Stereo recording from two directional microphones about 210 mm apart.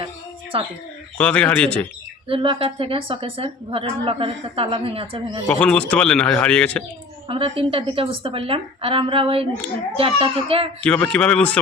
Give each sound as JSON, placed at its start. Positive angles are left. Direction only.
{"t": 0.5, "sound": "a woman's voice", "side_deg": -25}
{"t": 1.2, "sound": "a man's voice", "side_deg": 5}
{"t": 2.2, "sound": "a woman's voice", "side_deg": -25}
{"t": 5.5, "sound": "speech", "side_deg": 5}
{"t": 7.3, "sound": "a woman's voice", "side_deg": -25}
{"t": 10.8, "sound": "speech", "side_deg": 5}